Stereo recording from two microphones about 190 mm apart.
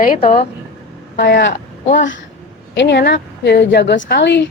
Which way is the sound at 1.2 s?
65° left (ahead or behind).